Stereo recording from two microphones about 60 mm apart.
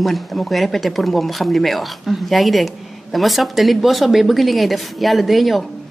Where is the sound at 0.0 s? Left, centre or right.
Centre.